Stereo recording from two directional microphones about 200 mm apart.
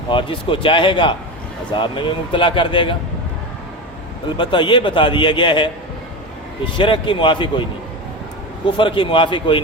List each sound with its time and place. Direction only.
0.1 s a man's voice: 25° left (ahead or behind)
4.3 s a man's voice: 25° left (ahead or behind)
6.7 s a man's voice: 25° left (ahead or behind)
8.7 s a man's voice: 25° left (ahead or behind)